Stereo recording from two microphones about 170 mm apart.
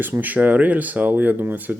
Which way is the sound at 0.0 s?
10° right (ahead or behind).